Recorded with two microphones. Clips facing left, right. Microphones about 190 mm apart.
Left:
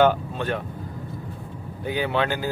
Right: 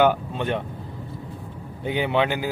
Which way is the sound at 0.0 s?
20° right (ahead or behind).